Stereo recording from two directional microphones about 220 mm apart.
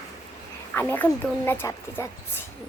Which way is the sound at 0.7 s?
10° left (ahead or behind).